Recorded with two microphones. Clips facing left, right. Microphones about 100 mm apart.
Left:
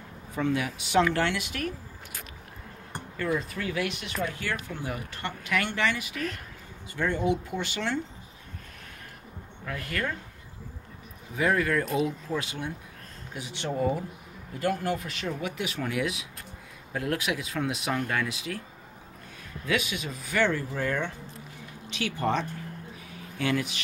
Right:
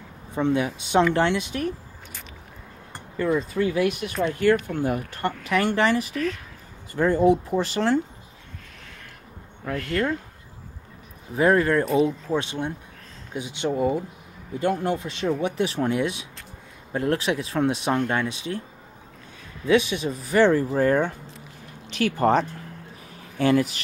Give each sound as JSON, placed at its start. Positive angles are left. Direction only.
{"t": 0.3, "sound": "speech", "side_deg": -25}
{"t": 3.5, "sound": "speech", "side_deg": -25}
{"t": 4.4, "sound": "speech", "side_deg": -50}
{"t": 6.1, "sound": "speech", "side_deg": 0}
{"t": 6.9, "sound": "speech", "side_deg": -40}
{"t": 11.3, "sound": "speech", "side_deg": -35}
{"t": 19.7, "sound": "speech", "side_deg": -30}